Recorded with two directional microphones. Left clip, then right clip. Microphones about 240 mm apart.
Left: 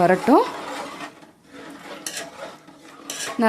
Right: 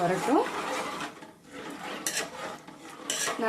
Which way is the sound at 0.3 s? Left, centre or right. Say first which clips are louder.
Left 9 dB; left.